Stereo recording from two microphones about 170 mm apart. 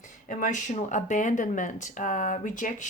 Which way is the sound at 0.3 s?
50° left (ahead or behind).